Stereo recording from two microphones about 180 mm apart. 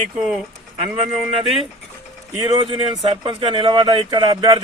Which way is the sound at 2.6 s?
30° right (ahead or behind).